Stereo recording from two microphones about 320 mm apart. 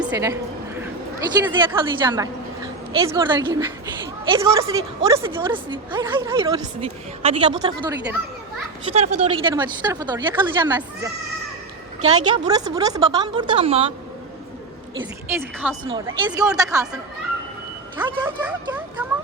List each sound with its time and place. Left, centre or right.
0.0 s a woman's voice: centre
1.5 s a woman's voice: centre
14.9 s a woman's voice: centre
17.9 s speech: centre